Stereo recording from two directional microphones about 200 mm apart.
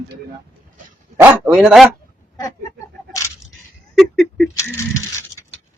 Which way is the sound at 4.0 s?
Centre (ahead or behind).